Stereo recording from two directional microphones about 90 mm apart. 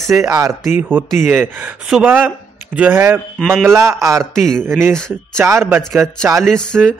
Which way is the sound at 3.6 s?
30° right (ahead or behind).